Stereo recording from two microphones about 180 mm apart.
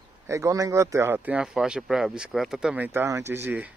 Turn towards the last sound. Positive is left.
turn(degrees=-10)  # may be behind; listen again after turning